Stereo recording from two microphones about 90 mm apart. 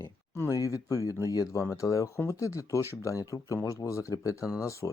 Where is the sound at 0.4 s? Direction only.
40° left (ahead or behind).